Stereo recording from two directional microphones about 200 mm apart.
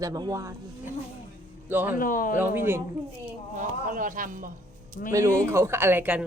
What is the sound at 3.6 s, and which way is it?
Speech, 40° right (ahead or behind).